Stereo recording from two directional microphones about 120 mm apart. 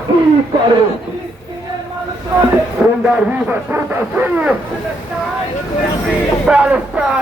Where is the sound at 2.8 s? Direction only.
10° right (ahead or behind).